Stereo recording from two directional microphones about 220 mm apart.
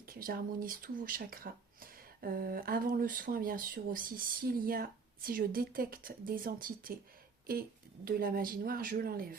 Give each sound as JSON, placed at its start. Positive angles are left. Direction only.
{"t": 0.0, "sound": "speech", "side_deg": -40}